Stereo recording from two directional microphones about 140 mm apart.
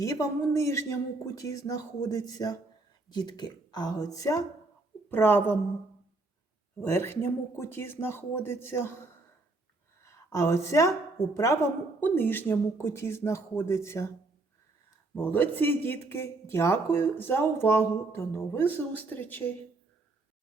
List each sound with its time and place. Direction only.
0.0 s speech: 25° left (ahead or behind)
5.0 s speech: 15° left (ahead or behind)
6.8 s a woman's voice: 15° left (ahead or behind)
15.1 s speech: 15° left (ahead or behind)